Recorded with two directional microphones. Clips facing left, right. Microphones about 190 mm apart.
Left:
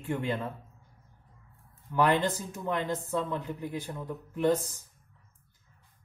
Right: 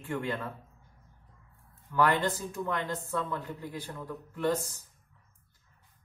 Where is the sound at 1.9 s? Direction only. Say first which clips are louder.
Left 1 dB; 20° left (ahead or behind).